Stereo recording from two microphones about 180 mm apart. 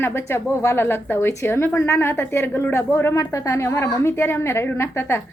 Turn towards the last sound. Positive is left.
turn(degrees=15)  # may be behind; listen again after turning